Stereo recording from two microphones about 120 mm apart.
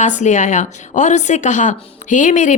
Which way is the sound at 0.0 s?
90° left.